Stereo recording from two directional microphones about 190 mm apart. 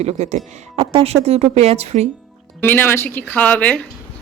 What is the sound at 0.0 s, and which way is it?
Speech, 35° right (ahead or behind).